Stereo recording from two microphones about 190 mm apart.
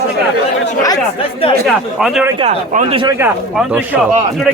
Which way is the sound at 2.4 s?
40° right (ahead or behind).